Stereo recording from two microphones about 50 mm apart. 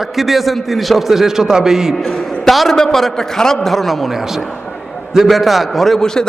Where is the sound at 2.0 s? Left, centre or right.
Centre.